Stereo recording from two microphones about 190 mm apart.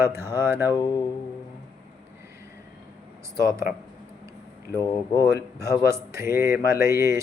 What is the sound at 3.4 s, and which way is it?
Speech, 15° right (ahead or behind).